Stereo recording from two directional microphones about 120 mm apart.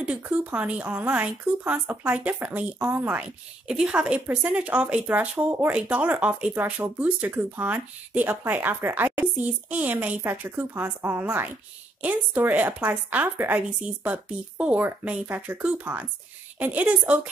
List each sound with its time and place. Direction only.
0.0 s speech: 10° right (ahead or behind)